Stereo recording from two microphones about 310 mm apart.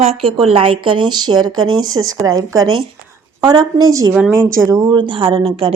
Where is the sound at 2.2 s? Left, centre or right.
Centre.